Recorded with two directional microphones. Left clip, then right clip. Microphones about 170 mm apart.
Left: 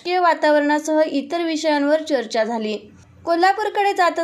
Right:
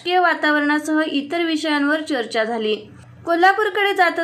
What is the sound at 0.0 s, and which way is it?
A woman's voice, 35° left (ahead or behind).